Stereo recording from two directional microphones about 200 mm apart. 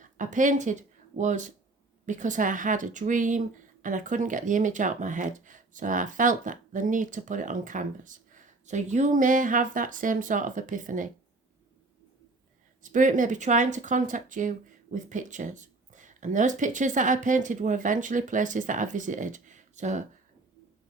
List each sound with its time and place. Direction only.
0.0 s speech: 40° right (ahead or behind)
12.8 s speech: 40° right (ahead or behind)